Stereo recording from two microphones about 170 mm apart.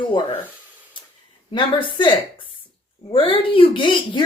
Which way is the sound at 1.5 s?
30° left (ahead or behind).